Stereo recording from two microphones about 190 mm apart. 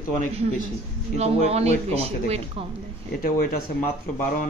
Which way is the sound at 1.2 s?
35° right (ahead or behind).